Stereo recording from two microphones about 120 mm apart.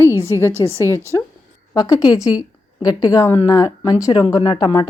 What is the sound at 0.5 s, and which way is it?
Speech, 20° right (ahead or behind).